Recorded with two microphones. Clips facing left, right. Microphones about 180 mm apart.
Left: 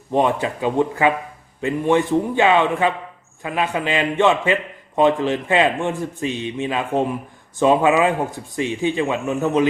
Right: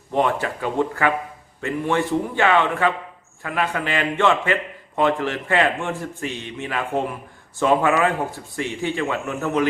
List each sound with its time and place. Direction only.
0.1 s a man's voice: 20° left (ahead or behind)